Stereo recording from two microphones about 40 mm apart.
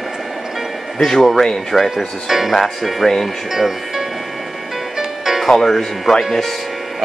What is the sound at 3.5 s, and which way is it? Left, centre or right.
Speech, centre.